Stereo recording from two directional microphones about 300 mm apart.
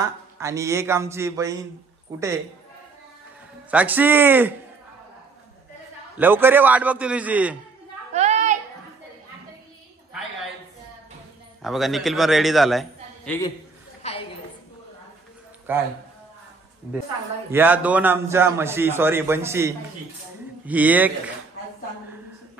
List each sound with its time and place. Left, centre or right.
0.0 s a man's voice: centre
3.7 s a man's voice: centre
6.1 s a man's voice: centre
8.1 s a sound: right
11.6 s a man's voice: centre
14.0 s a sound: left
15.7 s a man's voice: centre
17.5 s a man's voice: centre